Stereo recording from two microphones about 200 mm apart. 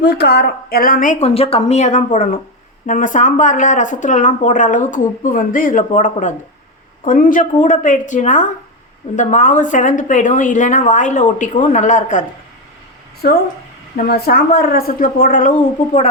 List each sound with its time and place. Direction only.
0.0 s speech: 55° left (ahead or behind); by 12.2 s 40° left (ahead or behind)
13.2 s speech: 50° left (ahead or behind)